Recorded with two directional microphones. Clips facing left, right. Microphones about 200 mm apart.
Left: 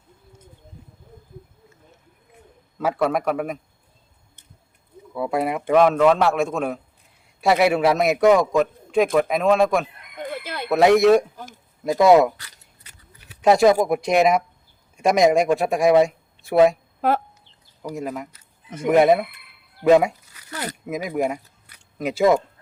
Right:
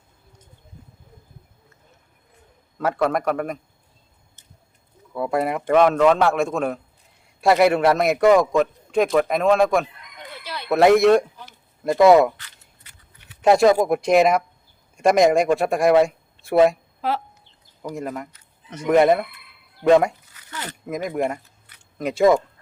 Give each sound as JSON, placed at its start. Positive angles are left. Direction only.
{"t": 2.7, "sound": "a man's voice", "side_deg": 5}
{"t": 5.1, "sound": "a man's voice", "side_deg": 0}
{"t": 10.0, "sound": "chicken", "side_deg": 50}
{"t": 10.7, "sound": "a man's voice", "side_deg": 0}
{"t": 11.3, "sound": "speech", "side_deg": 45}
{"t": 11.8, "sound": "a man's voice", "side_deg": 0}
{"t": 13.4, "sound": "a man's voice", "side_deg": 0}
{"t": 17.0, "sound": "speech", "side_deg": 50}
{"t": 17.8, "sound": "a man's voice", "side_deg": 5}
{"t": 20.5, "sound": "speech", "side_deg": 40}
{"t": 20.8, "sound": "a man's voice", "side_deg": 5}